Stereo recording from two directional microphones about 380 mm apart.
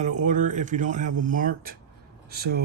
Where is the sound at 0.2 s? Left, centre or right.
Centre.